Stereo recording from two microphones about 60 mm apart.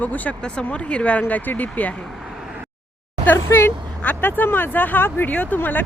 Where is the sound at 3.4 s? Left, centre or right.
Left.